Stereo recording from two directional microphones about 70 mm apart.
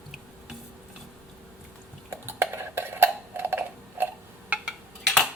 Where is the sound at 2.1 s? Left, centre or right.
Right.